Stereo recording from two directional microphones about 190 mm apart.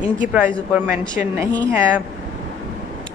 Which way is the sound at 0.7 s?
10° right (ahead or behind).